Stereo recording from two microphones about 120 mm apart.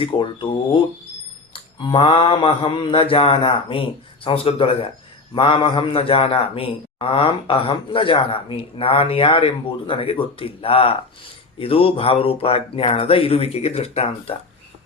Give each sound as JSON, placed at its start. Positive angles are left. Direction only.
{"t": 0.0, "sound": "a man's voice", "side_deg": 45}